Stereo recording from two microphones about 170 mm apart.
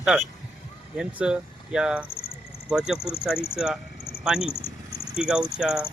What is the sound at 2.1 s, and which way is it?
Cricket, 60° left (ahead or behind).